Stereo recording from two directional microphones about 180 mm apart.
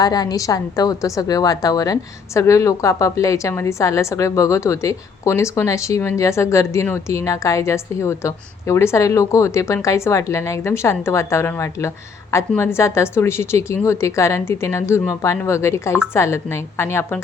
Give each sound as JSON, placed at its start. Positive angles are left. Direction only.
{"t": 0.0, "sound": "a woman's voice", "side_deg": 20}